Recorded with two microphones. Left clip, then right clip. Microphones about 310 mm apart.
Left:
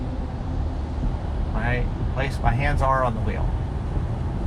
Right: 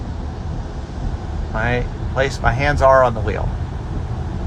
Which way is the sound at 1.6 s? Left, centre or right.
Centre.